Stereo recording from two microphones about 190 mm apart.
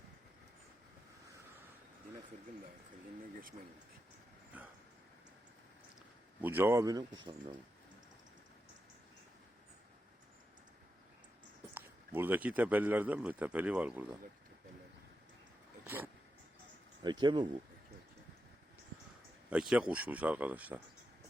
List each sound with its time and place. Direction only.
4.5 s speech: 5° right (ahead or behind)
6.4 s speech: 10° right (ahead or behind)
11.7 s speech: 10° right (ahead or behind)
17.0 s speech: 25° right (ahead or behind)
19.5 s speech: 5° right (ahead or behind)